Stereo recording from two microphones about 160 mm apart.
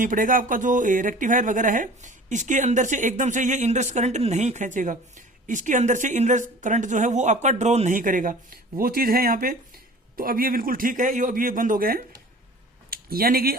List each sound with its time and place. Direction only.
0.0 s a man's voice: 55° right (ahead or behind)